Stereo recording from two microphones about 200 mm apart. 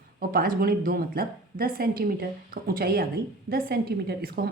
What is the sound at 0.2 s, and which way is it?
A woman's voice, 45° right (ahead or behind).